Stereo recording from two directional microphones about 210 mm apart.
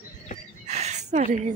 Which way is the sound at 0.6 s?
30° right (ahead or behind).